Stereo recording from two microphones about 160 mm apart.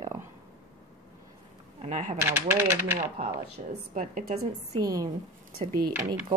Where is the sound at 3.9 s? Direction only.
55° right (ahead or behind).